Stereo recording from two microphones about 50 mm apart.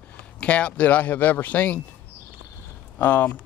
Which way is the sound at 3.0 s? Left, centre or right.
Left.